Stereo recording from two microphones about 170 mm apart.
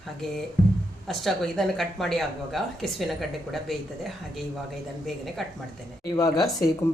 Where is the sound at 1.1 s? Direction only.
Centre (ahead or behind).